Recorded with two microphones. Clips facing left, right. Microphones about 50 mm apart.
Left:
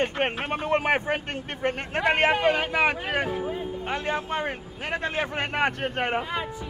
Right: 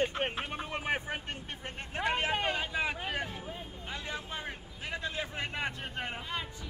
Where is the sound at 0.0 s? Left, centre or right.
Left.